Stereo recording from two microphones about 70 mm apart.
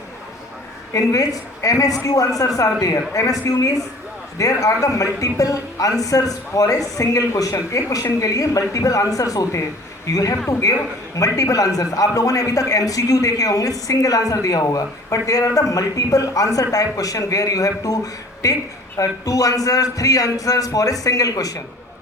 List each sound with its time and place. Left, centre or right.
0.9 s speech: left
4.4 s speech: left
11.3 s speech: left